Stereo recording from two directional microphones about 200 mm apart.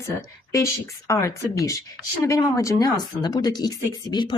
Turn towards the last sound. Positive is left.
turn(degrees=20)  # may be behind; listen again after turning